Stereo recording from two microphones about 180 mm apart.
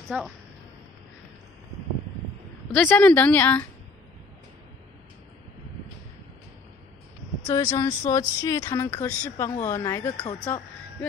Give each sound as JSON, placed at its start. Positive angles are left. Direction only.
{"t": 0.1, "sound": "a woman's voice", "side_deg": -5}
{"t": 2.7, "sound": "speech", "side_deg": 10}
{"t": 7.5, "sound": "speech", "side_deg": 15}